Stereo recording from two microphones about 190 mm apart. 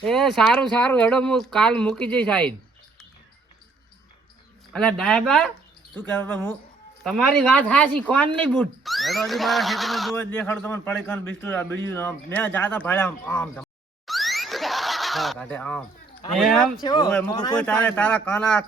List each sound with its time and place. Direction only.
0.0 s speech: centre (ahead or behind)
4.7 s a man's voice: 5° left (ahead or behind)
10.2 s a man's voice: 10° left (ahead or behind)
14.1 s a sound: centre (ahead or behind)
16.4 s speech: centre (ahead or behind)
16.8 s speech: 25° left (ahead or behind)
17.6 s a man's voice: 10° left (ahead or behind)